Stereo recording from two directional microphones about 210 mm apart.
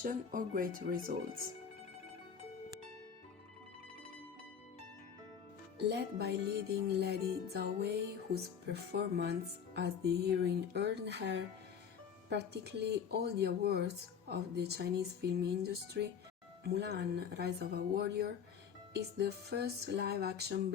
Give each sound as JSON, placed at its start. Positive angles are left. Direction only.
{"t": 0.0, "sound": "speech", "side_deg": -40}
{"t": 5.9, "sound": "speech", "side_deg": -50}